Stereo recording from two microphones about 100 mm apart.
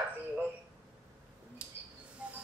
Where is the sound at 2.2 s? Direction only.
10° right (ahead or behind).